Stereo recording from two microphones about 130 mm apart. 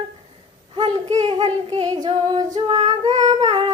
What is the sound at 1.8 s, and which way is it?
Female singing, 30° right (ahead or behind).